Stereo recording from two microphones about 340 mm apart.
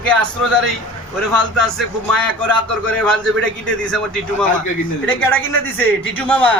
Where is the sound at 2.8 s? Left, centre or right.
Centre.